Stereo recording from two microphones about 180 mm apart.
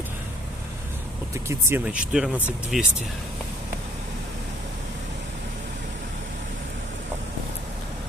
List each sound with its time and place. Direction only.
1.5 s speech: 15° right (ahead or behind)